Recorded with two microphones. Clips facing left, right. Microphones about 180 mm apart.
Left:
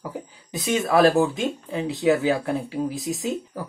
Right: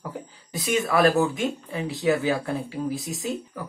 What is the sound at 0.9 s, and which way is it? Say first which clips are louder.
Speech: left 3 dB; 35° left (ahead or behind).